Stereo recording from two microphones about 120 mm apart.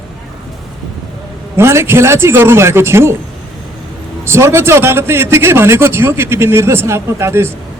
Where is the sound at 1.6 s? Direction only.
20° right (ahead or behind).